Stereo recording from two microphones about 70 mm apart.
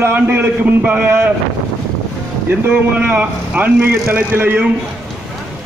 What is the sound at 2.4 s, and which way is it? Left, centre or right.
A man's voice, right.